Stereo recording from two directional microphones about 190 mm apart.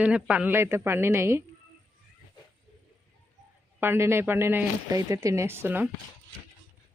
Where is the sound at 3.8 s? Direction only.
10° right (ahead or behind).